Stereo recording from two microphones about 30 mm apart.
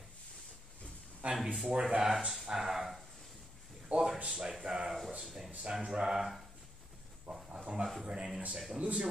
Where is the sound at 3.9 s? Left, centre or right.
Right.